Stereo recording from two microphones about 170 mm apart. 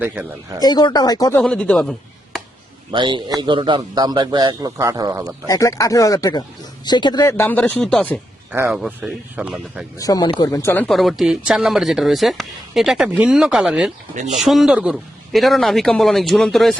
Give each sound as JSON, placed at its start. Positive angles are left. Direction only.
{"t": 0.6, "sound": "speech", "side_deg": 25}
{"t": 1.4, "sound": "speech", "side_deg": 5}
{"t": 2.9, "sound": "a man's voice", "side_deg": -30}
{"t": 5.5, "sound": "speech", "side_deg": 20}
{"t": 10.0, "sound": "speech", "side_deg": 20}
{"t": 10.8, "sound": "speech", "side_deg": 0}